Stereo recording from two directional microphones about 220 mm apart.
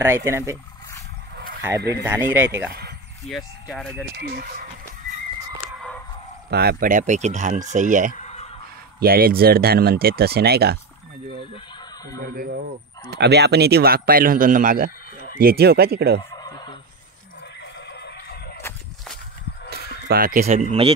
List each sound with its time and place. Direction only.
0.0 s speech: 10° right (ahead or behind)
2.0 s speech: 10° right (ahead or behind)
3.3 s speech: centre (ahead or behind)
4.2 s speech: 45° right (ahead or behind)
6.5 s speech: 45° right (ahead or behind)
11.5 s a sound: 15° left (ahead or behind)
12.2 s speech: 40° right (ahead or behind)
16.3 s fowl: 20° left (ahead or behind)
17.7 s neigh: 50° left (ahead or behind)
19.7 s speech: 45° right (ahead or behind); by 20.9 s 30° right (ahead or behind)